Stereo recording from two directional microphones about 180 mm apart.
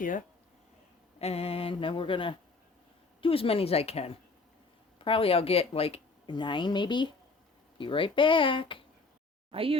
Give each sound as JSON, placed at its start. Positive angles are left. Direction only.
{"t": 0.0, "sound": "speech", "side_deg": 45}
{"t": 1.2, "sound": "speech", "side_deg": 35}
{"t": 9.5, "sound": "speech", "side_deg": -30}